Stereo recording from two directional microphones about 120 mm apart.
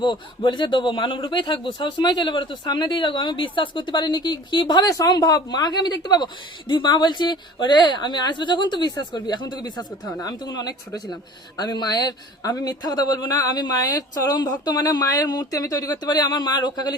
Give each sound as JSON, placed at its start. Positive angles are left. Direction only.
{"t": 0.0, "sound": "a man's voice", "side_deg": 40}